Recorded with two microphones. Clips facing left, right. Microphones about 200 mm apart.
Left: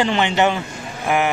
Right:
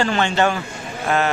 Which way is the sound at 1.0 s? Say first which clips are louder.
Left 1 dB; 15° left (ahead or behind).